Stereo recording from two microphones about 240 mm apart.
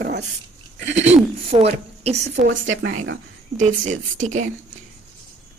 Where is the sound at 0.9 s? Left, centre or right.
Right.